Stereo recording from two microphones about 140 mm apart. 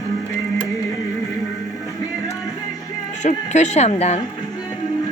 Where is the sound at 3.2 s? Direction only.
55° left (ahead or behind).